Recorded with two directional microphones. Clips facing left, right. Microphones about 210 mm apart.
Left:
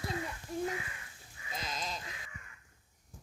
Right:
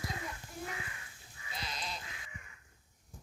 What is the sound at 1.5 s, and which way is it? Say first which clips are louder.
Sheep: left 3 dB; 45° left (ahead or behind).